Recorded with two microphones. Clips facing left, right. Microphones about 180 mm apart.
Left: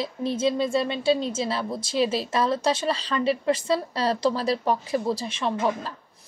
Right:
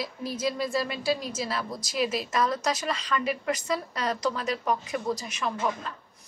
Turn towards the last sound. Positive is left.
turn(degrees=30)  # may be behind; listen again after turning